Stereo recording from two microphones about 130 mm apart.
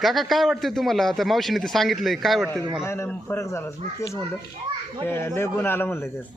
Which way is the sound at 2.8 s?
20° left (ahead or behind).